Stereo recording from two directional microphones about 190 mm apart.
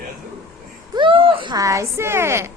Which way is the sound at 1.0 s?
25° right (ahead or behind).